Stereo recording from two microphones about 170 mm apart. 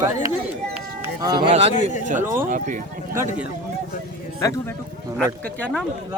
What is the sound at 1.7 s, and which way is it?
Speech, 45° left (ahead or behind).